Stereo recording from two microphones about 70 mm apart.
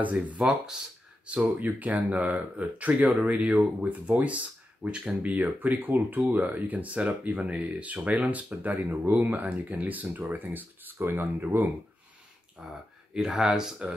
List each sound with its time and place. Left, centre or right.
0.0 s speech: right
0.4 s speech: centre
1.2 s speech: right
12.6 s speech: centre